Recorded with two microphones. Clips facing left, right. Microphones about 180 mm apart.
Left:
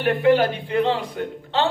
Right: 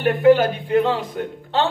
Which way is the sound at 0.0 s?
45° right (ahead or behind).